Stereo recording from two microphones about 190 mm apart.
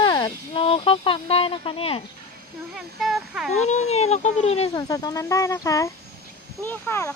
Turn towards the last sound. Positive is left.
turn(degrees=10)  # may be behind; listen again after turning